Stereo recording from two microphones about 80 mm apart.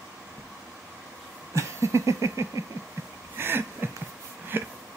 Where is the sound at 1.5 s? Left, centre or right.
Right.